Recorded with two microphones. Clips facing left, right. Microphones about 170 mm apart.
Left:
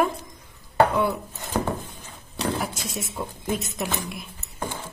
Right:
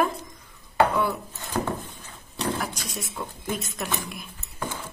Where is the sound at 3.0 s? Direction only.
20° left (ahead or behind).